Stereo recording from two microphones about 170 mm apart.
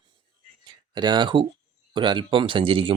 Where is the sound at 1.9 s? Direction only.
30° right (ahead or behind).